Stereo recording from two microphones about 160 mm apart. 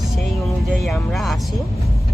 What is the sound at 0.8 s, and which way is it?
Speech, centre (ahead or behind).